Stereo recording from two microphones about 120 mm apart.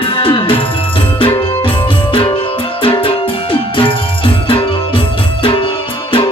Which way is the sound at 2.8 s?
45° left (ahead or behind).